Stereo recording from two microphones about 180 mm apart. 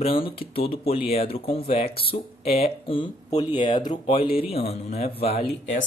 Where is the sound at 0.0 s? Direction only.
30° left (ahead or behind).